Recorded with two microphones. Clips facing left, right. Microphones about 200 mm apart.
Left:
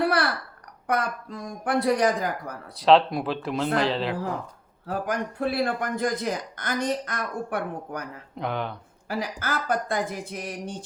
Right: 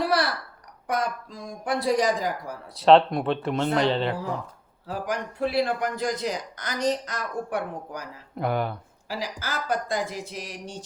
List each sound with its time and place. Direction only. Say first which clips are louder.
0.0 s babbling: left 1 dB; 60° left (ahead or behind)
0.9 s a man's voice: left 1 dB; 60° left (ahead or behind)
2.8 s speech: right 2 dB; centre (ahead or behind)
4.9 s a man's voice: left 2 dB; 55° left (ahead or behind)
8.4 s speech: right 3 dB; 10° right (ahead or behind)
9.0 s a woman's voice: left 3 dB; 55° left (ahead or behind)